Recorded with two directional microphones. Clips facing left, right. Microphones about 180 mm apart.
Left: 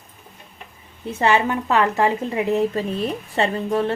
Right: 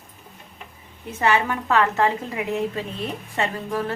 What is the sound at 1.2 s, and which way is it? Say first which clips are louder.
Speech: left 2 dB; 25° left (ahead or behind).